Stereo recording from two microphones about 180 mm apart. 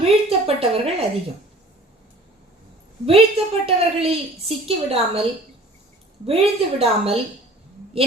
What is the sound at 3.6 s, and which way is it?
A woman's voice, 30° right (ahead or behind).